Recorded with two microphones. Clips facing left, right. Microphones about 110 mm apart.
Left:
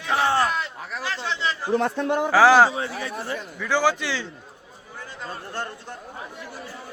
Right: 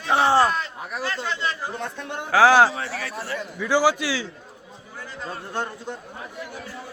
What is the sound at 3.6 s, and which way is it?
Speech, 10° right (ahead or behind).